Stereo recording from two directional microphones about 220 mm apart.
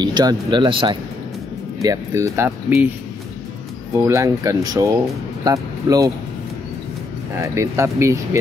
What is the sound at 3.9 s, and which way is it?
Speech, 15° right (ahead or behind).